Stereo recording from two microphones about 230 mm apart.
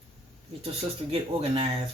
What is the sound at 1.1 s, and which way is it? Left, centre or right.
Speech, right.